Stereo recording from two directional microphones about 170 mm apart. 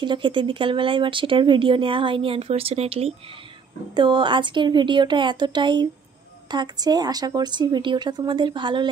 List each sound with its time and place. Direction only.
0.0 s a woman's voice: 30° right (ahead or behind)